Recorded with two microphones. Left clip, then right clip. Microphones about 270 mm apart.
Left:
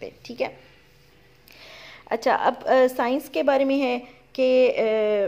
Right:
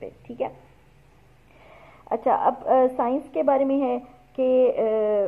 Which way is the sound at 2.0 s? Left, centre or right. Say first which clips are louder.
Even; left.